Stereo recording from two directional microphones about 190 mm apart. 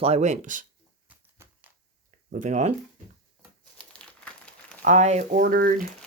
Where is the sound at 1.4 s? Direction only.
15° right (ahead or behind).